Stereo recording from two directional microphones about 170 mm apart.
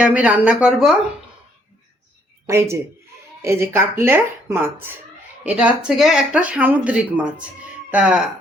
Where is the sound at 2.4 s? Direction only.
15° right (ahead or behind).